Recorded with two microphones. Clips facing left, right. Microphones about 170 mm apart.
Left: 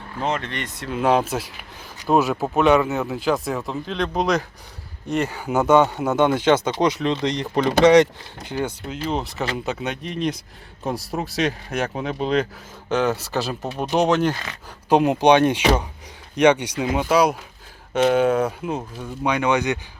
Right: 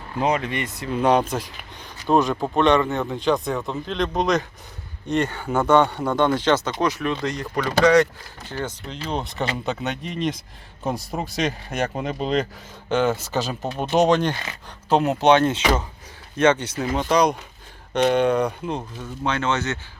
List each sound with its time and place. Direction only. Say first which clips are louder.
0.2 s speech: right 3 dB; 10° right (ahead or behind); by 6.6 s 10° left (ahead or behind)
6.7 s speech: left 3 dB; 25° left (ahead or behind); by 14.3 s 5° left (ahead or behind)
14.8 s speech: left 2 dB; 15° left (ahead or behind)